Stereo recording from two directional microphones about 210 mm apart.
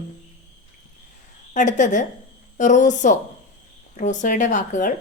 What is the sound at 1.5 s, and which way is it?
A woman's voice, 35° left (ahead or behind).